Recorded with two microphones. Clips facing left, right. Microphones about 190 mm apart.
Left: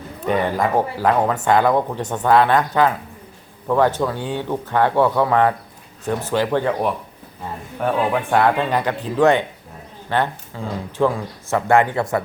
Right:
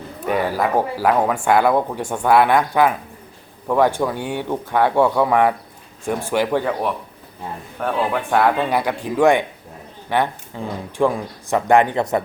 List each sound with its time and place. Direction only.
0.3 s speech: 5° right (ahead or behind)
7.8 s speech: centre (ahead or behind); by 12.2 s 20° right (ahead or behind)